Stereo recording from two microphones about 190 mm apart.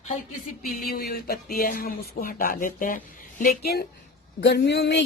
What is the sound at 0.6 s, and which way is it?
Speech, 50° left (ahead or behind).